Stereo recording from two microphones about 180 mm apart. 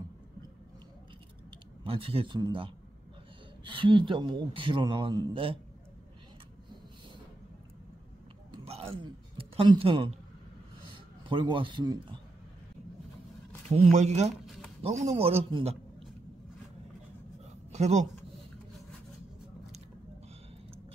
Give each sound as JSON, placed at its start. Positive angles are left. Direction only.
{"t": 1.9, "sound": "a man's voice", "side_deg": -30}
{"t": 8.5, "sound": "a sound", "side_deg": -35}
{"t": 11.2, "sound": "a man's voice", "side_deg": -30}
{"t": 13.7, "sound": "a man's voice", "side_deg": -35}
{"t": 14.4, "sound": "a sound", "side_deg": 0}
{"t": 14.8, "sound": "a man's voice", "side_deg": -35}
{"t": 17.7, "sound": "speech", "side_deg": -40}